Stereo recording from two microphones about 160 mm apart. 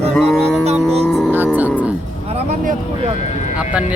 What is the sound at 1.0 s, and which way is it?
Music, centre (ahead or behind).